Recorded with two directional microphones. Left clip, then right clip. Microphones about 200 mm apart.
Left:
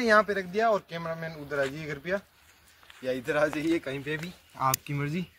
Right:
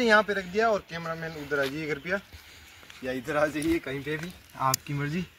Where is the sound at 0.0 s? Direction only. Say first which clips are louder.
Right 1 dB; 30° left (ahead or behind); by 4.3 s 15° left (ahead or behind).